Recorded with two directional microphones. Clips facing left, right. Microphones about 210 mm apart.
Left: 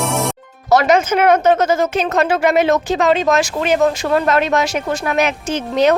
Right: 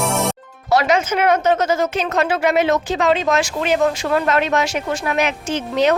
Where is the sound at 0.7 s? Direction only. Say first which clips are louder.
Left 4 dB; 45° left (ahead or behind).